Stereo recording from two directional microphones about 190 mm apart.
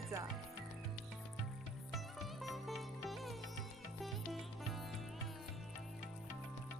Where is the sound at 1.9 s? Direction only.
Centre (ahead or behind).